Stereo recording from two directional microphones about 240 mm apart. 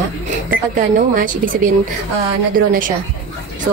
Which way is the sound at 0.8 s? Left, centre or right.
Right.